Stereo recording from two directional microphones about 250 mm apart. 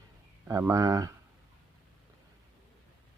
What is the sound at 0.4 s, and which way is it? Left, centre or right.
Speech, centre.